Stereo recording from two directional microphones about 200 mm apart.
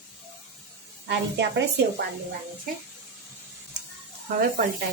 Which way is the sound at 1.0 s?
60° right (ahead or behind).